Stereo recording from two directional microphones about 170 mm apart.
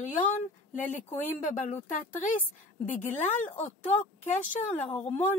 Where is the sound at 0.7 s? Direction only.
50° left (ahead or behind).